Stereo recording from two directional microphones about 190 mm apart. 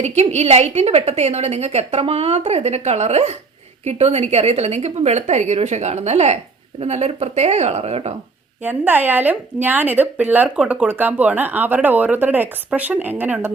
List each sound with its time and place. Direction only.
0.0 s a woman's voice: 35° right (ahead or behind)
8.6 s speech: 10° right (ahead or behind)